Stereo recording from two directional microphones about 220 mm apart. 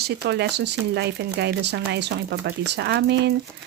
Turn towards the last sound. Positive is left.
turn(degrees=-50)  # may be behind; listen again after turning